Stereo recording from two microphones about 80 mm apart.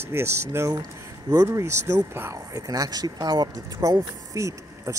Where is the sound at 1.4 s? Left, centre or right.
Right.